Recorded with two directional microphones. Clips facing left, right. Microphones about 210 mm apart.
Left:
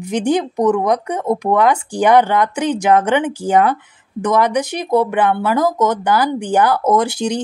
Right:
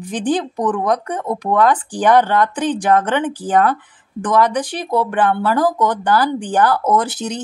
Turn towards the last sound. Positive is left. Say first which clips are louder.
# left 3 dB
turn(degrees=10)  # may be behind; listen again after turning